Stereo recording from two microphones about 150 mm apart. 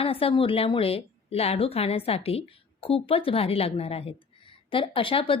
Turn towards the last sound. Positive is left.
turn(degrees=35)  # may be behind; listen again after turning